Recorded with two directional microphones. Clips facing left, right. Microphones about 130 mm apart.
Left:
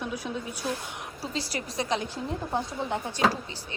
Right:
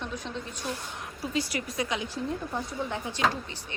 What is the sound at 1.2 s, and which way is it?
Speech, 35° left (ahead or behind).